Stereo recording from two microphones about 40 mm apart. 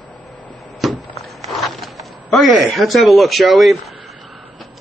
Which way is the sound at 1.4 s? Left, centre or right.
Centre.